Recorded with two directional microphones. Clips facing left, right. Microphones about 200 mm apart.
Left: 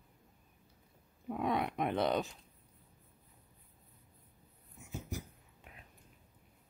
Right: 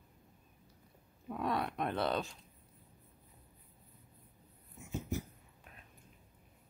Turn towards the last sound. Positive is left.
turn(degrees=0)  # may be behind; listen again after turning